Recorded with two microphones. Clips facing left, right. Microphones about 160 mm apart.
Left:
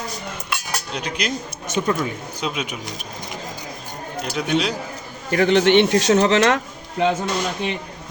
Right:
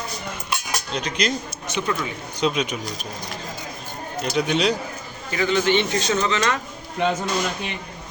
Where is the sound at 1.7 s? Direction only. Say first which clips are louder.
Left 4 dB; 50° left (ahead or behind).